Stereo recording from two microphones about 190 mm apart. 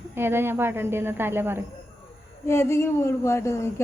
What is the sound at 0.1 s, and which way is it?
A woman's voice, 10° right (ahead or behind).